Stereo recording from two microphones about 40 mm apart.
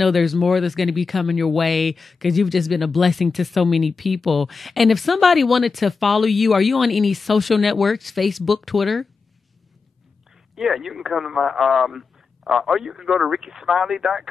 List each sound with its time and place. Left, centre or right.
0.0 s speech: centre
10.5 s a man's voice: centre